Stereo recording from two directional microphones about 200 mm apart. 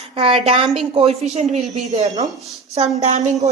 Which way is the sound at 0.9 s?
30° right (ahead or behind).